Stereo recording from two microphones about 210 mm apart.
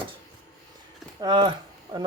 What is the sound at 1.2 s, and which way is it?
Speech, 20° right (ahead or behind).